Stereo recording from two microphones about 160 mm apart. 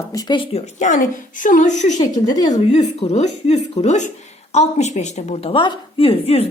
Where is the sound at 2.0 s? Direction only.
25° left (ahead or behind).